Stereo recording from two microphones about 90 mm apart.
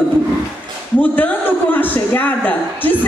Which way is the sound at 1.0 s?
20° left (ahead or behind).